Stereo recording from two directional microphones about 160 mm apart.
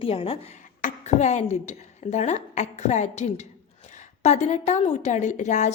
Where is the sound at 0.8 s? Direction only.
50° left (ahead or behind).